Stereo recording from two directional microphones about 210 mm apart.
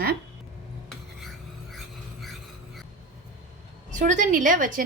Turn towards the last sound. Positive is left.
turn(degrees=-40)  # may be behind; listen again after turning